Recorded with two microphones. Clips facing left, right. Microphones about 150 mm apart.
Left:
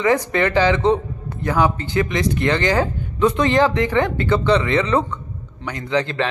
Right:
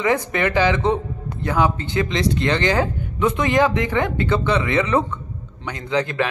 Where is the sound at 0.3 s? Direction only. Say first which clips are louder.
Left 2 dB; 15° right (ahead or behind).